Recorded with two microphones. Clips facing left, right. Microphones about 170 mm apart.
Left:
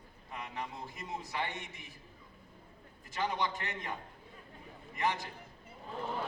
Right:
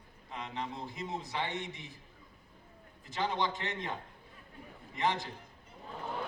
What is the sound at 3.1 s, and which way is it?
Speech, 20° right (ahead or behind).